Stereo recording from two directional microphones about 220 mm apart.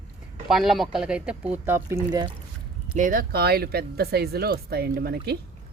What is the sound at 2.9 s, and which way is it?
Speech, 40° right (ahead or behind).